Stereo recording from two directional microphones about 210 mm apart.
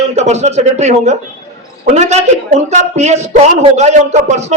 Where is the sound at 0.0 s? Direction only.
30° right (ahead or behind).